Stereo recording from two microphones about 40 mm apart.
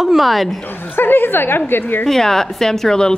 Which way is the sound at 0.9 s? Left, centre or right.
Left.